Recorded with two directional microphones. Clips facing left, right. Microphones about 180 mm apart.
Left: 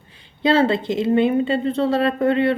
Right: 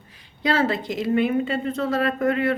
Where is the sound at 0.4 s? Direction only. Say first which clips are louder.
Left 5 dB; 25° left (ahead or behind).